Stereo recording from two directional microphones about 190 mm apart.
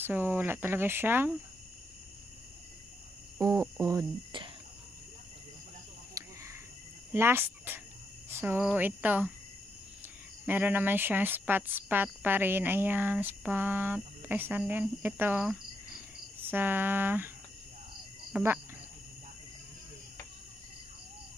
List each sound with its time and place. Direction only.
0.0 s speech: 10° right (ahead or behind)
3.3 s speech: 15° right (ahead or behind)
6.2 s cricket: 20° right (ahead or behind)
7.1 s speech: 10° right (ahead or behind)
10.4 s speech: 10° right (ahead or behind)
18.3 s speech: 10° right (ahead or behind)